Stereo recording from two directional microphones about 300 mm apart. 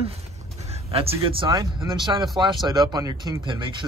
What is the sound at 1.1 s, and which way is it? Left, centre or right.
Speech, centre.